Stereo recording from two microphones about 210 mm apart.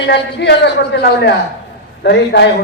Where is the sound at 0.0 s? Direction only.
55° left (ahead or behind).